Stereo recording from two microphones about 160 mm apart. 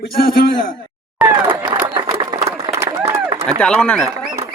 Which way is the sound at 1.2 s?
25° right (ahead or behind).